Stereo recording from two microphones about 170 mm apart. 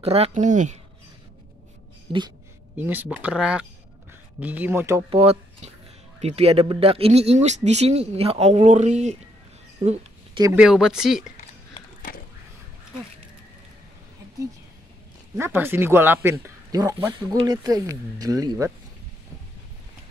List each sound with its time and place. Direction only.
0.0 s speech: 35° right (ahead or behind)
2.8 s speech: 10° right (ahead or behind)
5.1 s speech: 35° right (ahead or behind)
9.8 s a sound: 40° right (ahead or behind)
10.5 s speech: 5° right (ahead or behind)
15.3 s speech: 15° right (ahead or behind)